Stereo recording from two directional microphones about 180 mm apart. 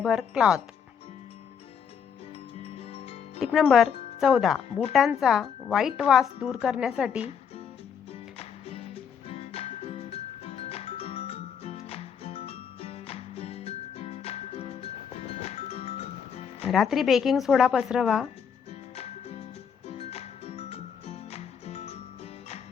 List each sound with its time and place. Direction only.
0.0 s speech: 5° right (ahead or behind)
2.8 s music: 35° left (ahead or behind)
3.4 s speech: centre (ahead or behind)
7.2 s music: 35° left (ahead or behind)
16.6 s speech: centre (ahead or behind)
18.7 s music: 35° left (ahead or behind)